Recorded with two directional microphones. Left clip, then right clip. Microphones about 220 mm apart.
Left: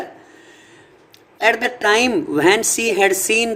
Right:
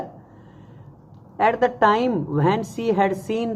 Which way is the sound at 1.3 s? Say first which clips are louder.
Left 1 dB; 45° left (ahead or behind).